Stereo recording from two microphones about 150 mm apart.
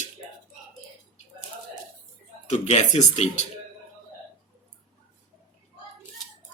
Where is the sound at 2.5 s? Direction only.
50° left (ahead or behind).